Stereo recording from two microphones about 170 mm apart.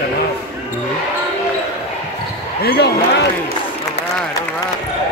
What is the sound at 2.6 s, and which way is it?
Speech, 75° left (ahead or behind).